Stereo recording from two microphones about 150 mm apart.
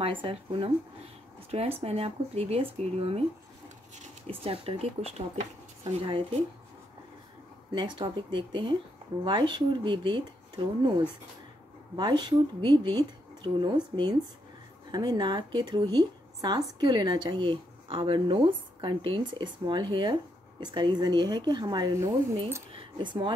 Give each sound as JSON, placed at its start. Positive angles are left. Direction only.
{"t": 0.0, "sound": "speech", "side_deg": -35}
{"t": 1.8, "sound": "speech", "side_deg": -40}
{"t": 4.3, "sound": "speech", "side_deg": -40}
{"t": 7.7, "sound": "speech", "side_deg": -30}